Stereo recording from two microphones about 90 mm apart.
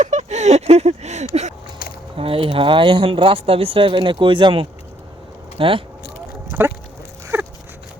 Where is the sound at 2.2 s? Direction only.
90° right; by 4.6 s 65° right (ahead or behind).